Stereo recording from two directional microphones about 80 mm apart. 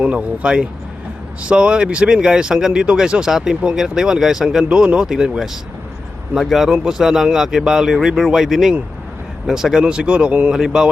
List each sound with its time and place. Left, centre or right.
0.0 s a man's voice: centre